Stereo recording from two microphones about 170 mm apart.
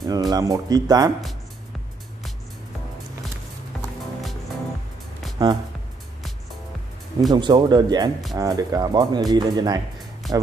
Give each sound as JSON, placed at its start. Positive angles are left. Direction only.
{"t": 0.0, "sound": "speech", "side_deg": -25}
{"t": 7.2, "sound": "speech", "side_deg": -25}
{"t": 10.2, "sound": "music", "side_deg": 0}